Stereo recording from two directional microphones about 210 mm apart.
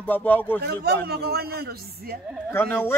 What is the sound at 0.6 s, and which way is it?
A man's voice, 50° right (ahead or behind).